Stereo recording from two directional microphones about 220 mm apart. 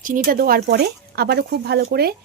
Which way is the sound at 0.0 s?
40° right (ahead or behind).